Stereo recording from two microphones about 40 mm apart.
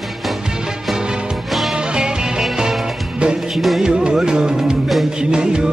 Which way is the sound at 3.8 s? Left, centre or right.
Centre.